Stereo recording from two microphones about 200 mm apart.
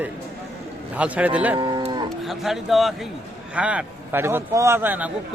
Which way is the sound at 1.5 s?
25° right (ahead or behind).